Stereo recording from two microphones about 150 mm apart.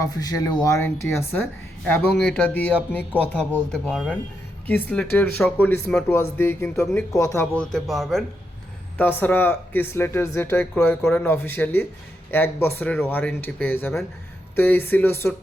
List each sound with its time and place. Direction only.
0.0 s speech: 25° left (ahead or behind)
0.9 s speech: 15° left (ahead or behind)
7.5 s speech: 5° left (ahead or behind)
9.0 s speech: 10° left (ahead or behind)